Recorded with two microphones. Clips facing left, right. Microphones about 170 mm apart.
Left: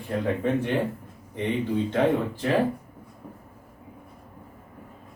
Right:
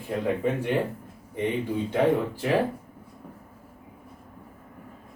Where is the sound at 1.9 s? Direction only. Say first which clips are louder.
Right 2 dB; 10° right (ahead or behind).